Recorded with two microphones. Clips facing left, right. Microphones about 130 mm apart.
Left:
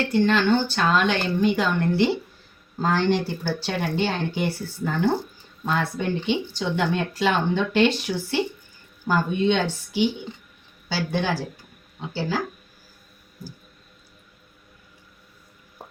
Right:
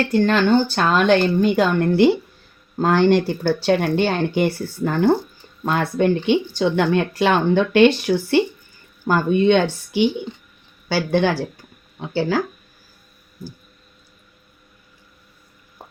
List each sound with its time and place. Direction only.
0.1 s speech: 50° right (ahead or behind); by 11.3 s 65° right (ahead or behind)